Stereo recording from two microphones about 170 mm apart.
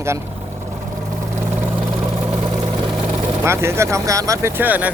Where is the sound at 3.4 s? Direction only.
15° right (ahead or behind).